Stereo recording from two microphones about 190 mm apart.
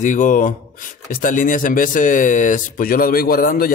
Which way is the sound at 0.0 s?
40° left (ahead or behind).